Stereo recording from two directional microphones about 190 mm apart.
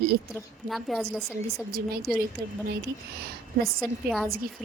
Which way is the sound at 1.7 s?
55° right (ahead or behind).